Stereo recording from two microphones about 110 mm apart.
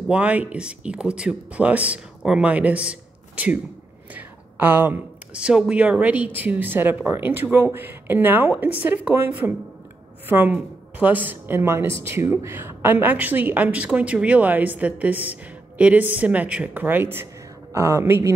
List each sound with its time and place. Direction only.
0.1 s a woman's voice: 10° right (ahead or behind)